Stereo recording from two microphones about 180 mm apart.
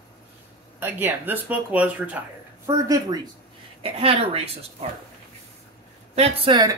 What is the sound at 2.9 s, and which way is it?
Speech, 20° right (ahead or behind).